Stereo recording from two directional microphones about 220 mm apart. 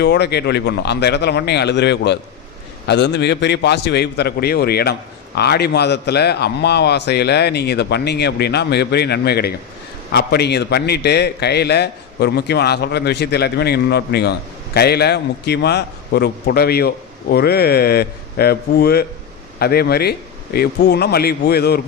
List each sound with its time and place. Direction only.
0.0 s a man's voice: 50° left (ahead or behind)